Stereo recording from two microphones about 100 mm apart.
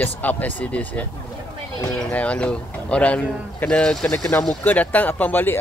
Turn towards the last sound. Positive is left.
turn(degrees=20)  # may be behind; listen again after turning